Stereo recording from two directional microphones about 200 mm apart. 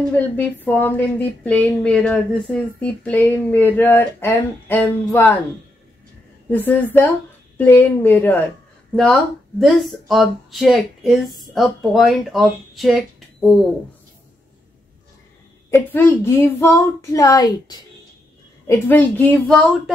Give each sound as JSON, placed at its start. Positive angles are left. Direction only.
{"t": 0.4, "sound": "a woman's voice", "side_deg": 10}
{"t": 6.5, "sound": "a woman's voice", "side_deg": 10}
{"t": 15.7, "sound": "a woman's voice", "side_deg": 10}